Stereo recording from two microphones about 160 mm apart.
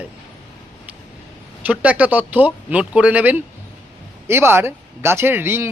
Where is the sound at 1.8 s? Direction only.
10° right (ahead or behind).